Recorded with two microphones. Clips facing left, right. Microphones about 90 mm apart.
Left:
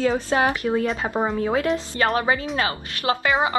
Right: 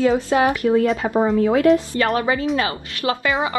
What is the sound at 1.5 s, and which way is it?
A woman's voice, 30° left (ahead or behind).